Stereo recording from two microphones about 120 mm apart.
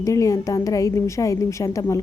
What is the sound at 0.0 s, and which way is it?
A woman's voice, 25° left (ahead or behind).